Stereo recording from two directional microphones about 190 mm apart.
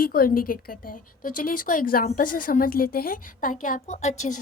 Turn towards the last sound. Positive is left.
turn(degrees=40)  # may be behind; listen again after turning